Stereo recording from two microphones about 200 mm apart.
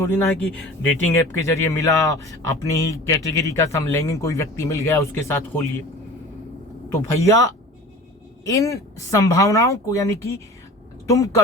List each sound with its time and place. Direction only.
0.0 s speech: 10° left (ahead or behind)
7.2 s speech: 15° left (ahead or behind)